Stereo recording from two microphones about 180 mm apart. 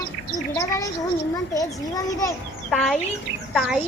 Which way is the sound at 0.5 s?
15° left (ahead or behind).